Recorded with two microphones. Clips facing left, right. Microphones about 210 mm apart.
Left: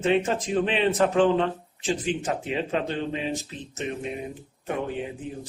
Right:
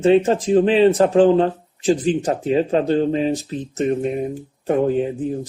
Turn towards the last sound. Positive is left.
turn(degrees=-40)  # may be behind; listen again after turning